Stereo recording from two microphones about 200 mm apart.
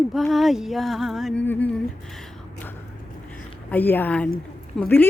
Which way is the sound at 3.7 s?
10° left (ahead or behind).